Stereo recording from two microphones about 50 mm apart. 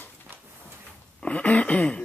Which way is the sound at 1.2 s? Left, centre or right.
Left.